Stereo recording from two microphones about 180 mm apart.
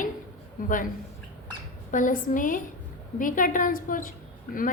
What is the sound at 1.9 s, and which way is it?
A woman's voice, 45° left (ahead or behind).